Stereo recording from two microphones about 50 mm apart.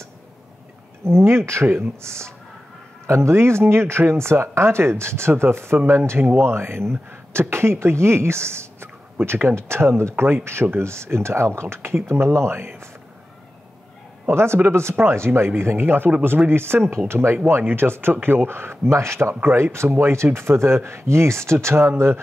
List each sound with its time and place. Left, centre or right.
1.0 s speech: right
9.2 s speech: right
9.7 s speech: right
14.2 s speech: right
18.9 s speech: right